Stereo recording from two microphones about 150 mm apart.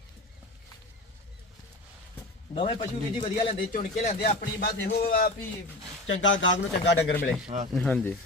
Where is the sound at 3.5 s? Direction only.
60° left (ahead or behind); by 5.3 s 80° left.